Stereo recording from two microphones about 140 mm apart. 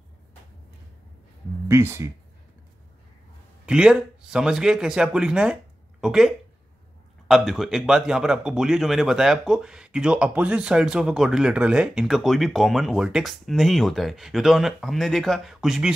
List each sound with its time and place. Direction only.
1.7 s speech: 20° right (ahead or behind)
3.6 s a man's voice: 5° right (ahead or behind)